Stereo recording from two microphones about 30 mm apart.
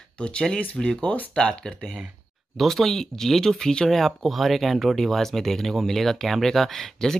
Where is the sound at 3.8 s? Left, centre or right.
Centre.